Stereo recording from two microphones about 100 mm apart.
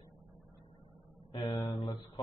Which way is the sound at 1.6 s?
40° left (ahead or behind).